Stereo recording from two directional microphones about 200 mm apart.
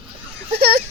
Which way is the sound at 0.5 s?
50° right (ahead or behind).